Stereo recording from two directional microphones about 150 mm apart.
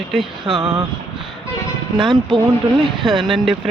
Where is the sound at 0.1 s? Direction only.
Centre (ahead or behind).